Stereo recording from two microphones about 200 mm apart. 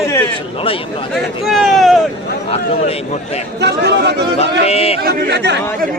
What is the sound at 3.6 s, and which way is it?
Speech, 55° right (ahead or behind).